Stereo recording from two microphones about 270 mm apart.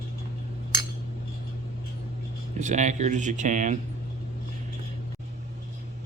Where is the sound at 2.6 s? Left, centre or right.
Right.